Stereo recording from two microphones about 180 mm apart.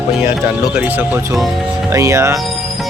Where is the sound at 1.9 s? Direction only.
15° right (ahead or behind).